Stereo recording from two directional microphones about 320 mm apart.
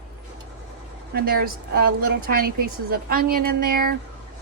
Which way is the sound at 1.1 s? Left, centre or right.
Right.